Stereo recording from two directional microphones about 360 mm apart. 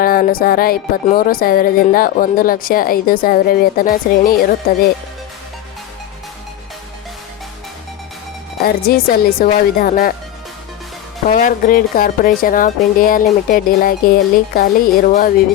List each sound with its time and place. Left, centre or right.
0.0 s music: left
8.6 s music: left
11.3 s music: left